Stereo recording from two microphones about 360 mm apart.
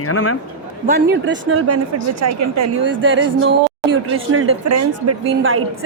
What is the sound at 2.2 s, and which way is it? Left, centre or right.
Speech, right.